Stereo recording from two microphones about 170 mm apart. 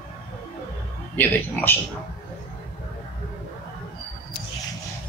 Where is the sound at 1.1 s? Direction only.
10° left (ahead or behind).